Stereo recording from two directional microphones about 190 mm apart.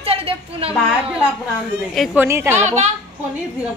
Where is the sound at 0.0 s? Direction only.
30° right (ahead or behind).